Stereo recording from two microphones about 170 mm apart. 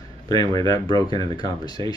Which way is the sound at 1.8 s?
30° right (ahead or behind).